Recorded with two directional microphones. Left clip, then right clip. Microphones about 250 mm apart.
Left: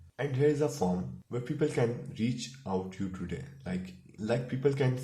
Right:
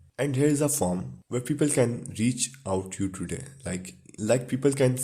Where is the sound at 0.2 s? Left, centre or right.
Right.